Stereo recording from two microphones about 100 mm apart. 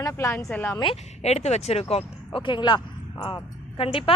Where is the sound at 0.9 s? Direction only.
90° left; by 4.0 s 65° left (ahead or behind).